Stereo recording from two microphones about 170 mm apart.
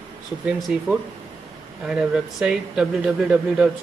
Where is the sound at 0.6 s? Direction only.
Centre (ahead or behind).